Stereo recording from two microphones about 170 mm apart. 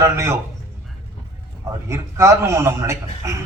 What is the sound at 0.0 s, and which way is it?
Speech, 15° right (ahead or behind).